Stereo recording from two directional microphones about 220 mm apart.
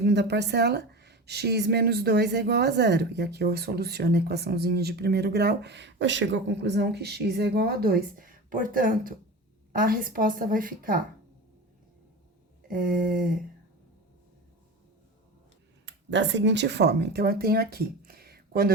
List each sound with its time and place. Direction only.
0.0 s a woman's voice: 50° right (ahead or behind)
12.6 s a woman's voice: 40° right (ahead or behind)
15.9 s speech: 55° right (ahead or behind)